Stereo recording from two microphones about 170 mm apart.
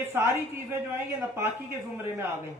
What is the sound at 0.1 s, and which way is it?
Speech, 15° right (ahead or behind).